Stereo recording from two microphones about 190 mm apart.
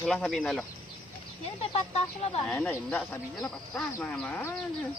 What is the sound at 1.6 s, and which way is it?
Speech, 30° left (ahead or behind).